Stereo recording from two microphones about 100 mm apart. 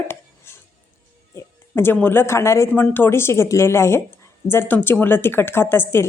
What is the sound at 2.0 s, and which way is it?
Speech, 20° left (ahead or behind).